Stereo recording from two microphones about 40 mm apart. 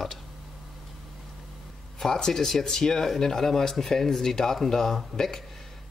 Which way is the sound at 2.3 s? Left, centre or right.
Centre.